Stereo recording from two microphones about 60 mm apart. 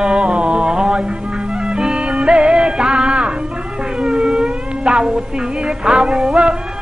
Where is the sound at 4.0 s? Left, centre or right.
Centre.